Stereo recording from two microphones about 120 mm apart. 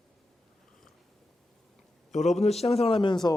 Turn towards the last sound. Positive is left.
turn(degrees=45)  # may be behind; listen again after turning